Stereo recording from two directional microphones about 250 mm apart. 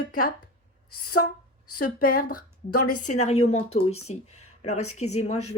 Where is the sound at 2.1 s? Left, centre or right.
Left.